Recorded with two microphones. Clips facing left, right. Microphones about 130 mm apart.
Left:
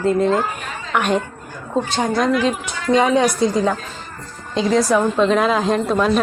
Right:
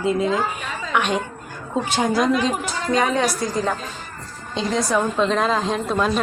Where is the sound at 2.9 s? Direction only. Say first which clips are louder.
Left 5 dB; 20° left (ahead or behind).